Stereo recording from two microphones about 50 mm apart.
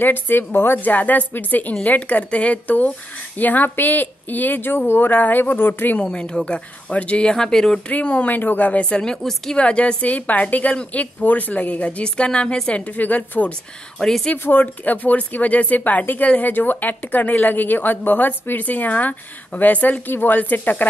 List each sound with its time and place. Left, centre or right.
0.0 s a woman's voice: left
0.8 s speech: left
6.0 s a woman's voice: left
7.9 s speech: left
8.8 s a woman's voice: centre
13.9 s speech: centre
14.3 s speech: left